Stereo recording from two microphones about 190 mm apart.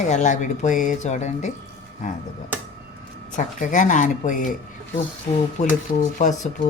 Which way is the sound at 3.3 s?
45° left (ahead or behind).